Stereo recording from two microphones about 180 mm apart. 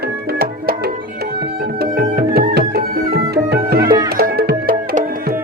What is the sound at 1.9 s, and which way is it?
Music, 60° right (ahead or behind).